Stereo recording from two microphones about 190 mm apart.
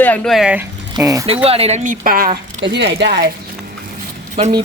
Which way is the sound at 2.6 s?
65° right (ahead or behind).